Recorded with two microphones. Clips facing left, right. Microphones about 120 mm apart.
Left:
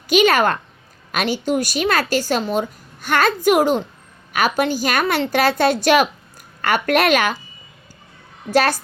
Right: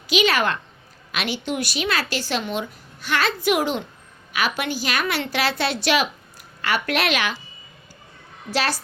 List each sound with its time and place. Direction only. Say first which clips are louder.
0.1 s a woman's voice: left 5 dB; 50° left (ahead or behind)
8.4 s a woman's voice: left 7 dB; 50° left (ahead or behind)